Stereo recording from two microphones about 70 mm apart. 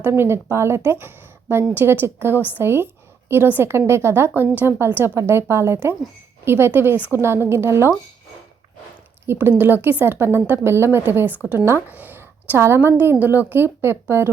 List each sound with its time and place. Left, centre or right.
0.0 s a woman's voice: right
9.2 s a woman's voice: right